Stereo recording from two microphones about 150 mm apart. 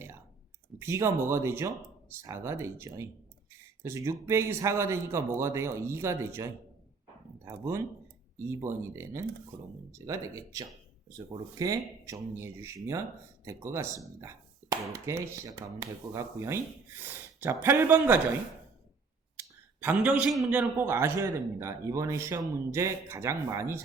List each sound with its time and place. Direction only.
0.8 s a man's voice: 20° right (ahead or behind)
19.4 s a man's voice: 10° right (ahead or behind)